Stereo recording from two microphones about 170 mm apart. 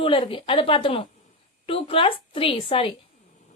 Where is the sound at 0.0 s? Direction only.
30° left (ahead or behind).